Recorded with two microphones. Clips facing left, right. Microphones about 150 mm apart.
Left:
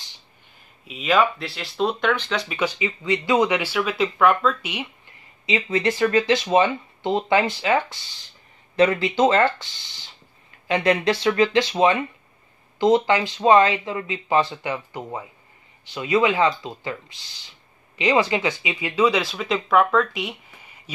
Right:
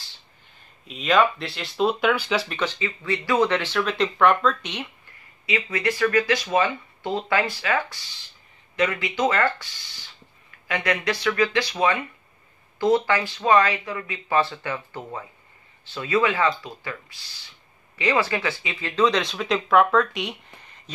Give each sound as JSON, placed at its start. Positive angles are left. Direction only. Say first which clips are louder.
{"t": 0.8, "sound": "speech", "louder": "even", "side_deg": 5}
{"t": 2.4, "sound": "speech", "louder": "left 3 dB", "side_deg": 10}
{"t": 5.5, "sound": "speech", "louder": "left 3 dB", "side_deg": 25}
{"t": 8.7, "sound": "speech", "louder": "left 6 dB", "side_deg": 30}
{"t": 10.7, "sound": "speech", "louder": "left 5 dB", "side_deg": 25}